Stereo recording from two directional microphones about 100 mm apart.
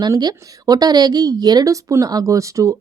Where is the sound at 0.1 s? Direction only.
40° right (ahead or behind).